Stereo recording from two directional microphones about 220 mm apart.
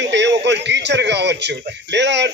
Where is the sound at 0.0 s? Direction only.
50° right (ahead or behind).